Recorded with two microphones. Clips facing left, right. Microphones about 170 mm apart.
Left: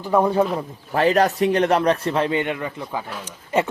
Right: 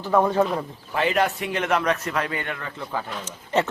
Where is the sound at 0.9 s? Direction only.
40° left (ahead or behind).